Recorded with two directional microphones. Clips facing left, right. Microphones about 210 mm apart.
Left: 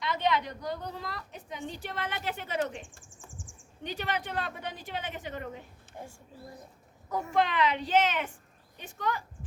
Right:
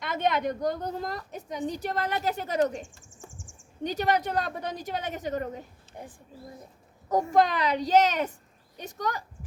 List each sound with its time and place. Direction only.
0.0 s a woman's voice: 50° right (ahead or behind)
2.9 s a sound: 55° left (ahead or behind)
3.8 s a woman's voice: 40° right (ahead or behind)
6.0 s a woman's voice: 20° right (ahead or behind)
7.1 s a woman's voice: 40° right (ahead or behind)